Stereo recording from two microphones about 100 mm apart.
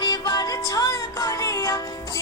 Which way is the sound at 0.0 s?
35° left (ahead or behind).